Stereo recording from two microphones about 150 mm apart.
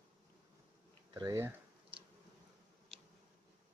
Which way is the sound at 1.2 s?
20° right (ahead or behind).